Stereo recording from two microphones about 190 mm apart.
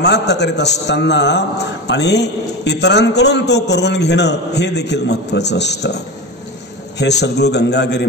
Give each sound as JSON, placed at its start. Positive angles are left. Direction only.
{"t": 0.0, "sound": "a man's voice", "side_deg": 60}